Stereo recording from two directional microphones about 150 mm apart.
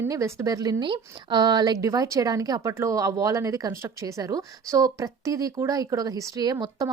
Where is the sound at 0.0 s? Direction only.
20° right (ahead or behind).